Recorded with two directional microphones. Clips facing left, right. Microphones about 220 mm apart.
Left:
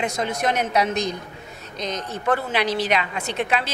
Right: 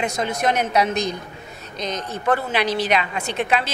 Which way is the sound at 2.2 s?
20° right (ahead or behind).